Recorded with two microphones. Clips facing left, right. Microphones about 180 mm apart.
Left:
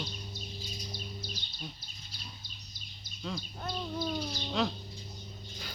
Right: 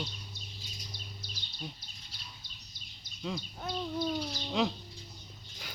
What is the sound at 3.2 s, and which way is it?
Speech, 15° right (ahead or behind).